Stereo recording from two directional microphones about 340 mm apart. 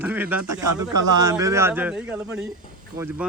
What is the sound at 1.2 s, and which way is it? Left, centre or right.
A man's voice, centre.